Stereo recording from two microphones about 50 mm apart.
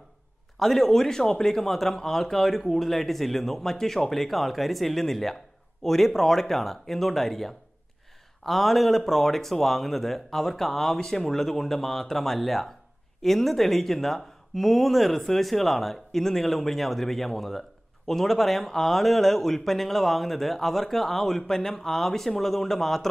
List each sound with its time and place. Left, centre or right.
0.6 s speech: centre